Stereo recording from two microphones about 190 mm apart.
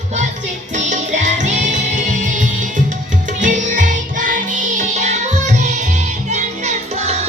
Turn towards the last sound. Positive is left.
turn(degrees=-35)  # may be behind; listen again after turning